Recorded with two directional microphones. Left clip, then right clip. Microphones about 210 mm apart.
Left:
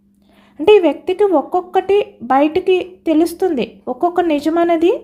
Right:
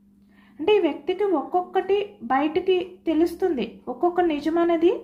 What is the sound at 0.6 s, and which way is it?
Speech, 55° left (ahead or behind).